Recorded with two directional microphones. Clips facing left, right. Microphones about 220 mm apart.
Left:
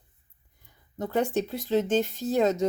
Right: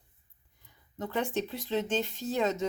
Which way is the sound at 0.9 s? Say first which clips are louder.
Left 5 dB; 40° left (ahead or behind).